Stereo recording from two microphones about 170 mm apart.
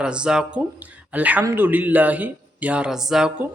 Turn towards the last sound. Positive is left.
turn(degrees=-5)  # may be behind; listen again after turning